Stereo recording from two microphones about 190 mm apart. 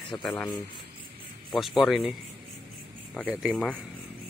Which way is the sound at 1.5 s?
Centre (ahead or behind).